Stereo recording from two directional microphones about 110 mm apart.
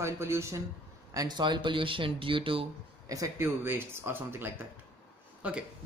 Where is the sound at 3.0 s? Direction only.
30° right (ahead or behind).